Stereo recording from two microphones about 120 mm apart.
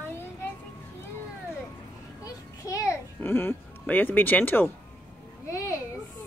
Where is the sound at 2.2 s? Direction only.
30° left (ahead or behind).